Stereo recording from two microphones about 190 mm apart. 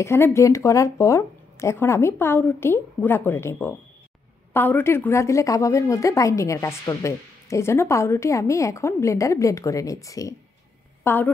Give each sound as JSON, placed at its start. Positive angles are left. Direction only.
{"t": 0.0, "sound": "a woman's voice", "side_deg": 15}